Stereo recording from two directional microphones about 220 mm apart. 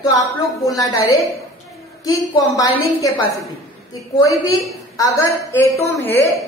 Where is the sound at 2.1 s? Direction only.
15° left (ahead or behind).